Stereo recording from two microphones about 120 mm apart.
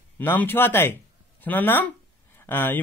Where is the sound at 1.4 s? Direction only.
15° left (ahead or behind).